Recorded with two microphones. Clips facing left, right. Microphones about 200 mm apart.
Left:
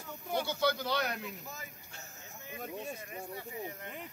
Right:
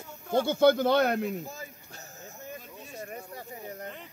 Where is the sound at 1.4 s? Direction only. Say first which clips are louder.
Right 6 dB; 30° right (ahead or behind).